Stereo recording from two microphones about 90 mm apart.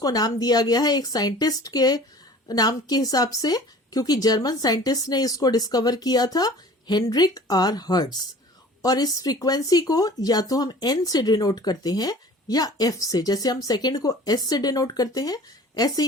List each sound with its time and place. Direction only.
0.0 s speech: 45° left (ahead or behind)